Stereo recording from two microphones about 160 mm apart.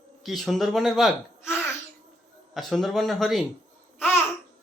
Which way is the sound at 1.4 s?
15° left (ahead or behind).